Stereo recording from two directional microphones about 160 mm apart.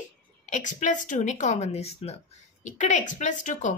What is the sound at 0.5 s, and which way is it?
A woman's voice, 50° left (ahead or behind).